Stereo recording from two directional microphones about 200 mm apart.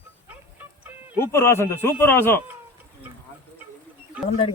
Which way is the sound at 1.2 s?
15° left (ahead or behind).